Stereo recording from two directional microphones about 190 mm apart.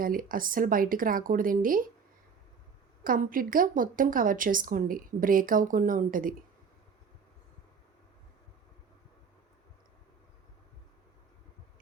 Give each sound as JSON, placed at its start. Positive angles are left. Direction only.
{"t": 0.0, "sound": "speech", "side_deg": -50}
{"t": 3.0, "sound": "speech", "side_deg": -45}